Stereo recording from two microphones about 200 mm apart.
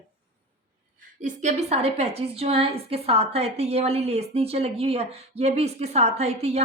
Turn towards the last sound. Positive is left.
turn(degrees=-30)  # may be behind; listen again after turning